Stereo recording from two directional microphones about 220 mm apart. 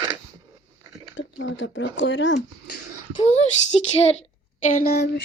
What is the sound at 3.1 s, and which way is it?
A woman's voice, 30° left (ahead or behind).